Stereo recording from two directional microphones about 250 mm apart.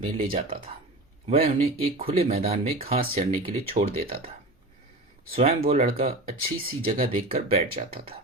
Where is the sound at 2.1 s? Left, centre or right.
Right.